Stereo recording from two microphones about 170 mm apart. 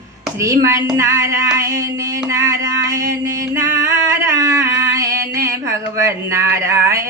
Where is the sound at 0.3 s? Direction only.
15° right (ahead or behind).